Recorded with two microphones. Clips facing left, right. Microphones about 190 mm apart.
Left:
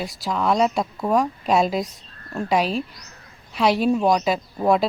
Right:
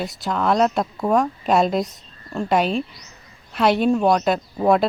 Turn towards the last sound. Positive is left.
turn(degrees=0)  # may be behind; listen again after turning